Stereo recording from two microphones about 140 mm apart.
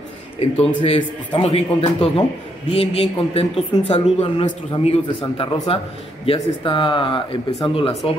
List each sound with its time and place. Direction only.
0.4 s a man's voice: 45° left (ahead or behind)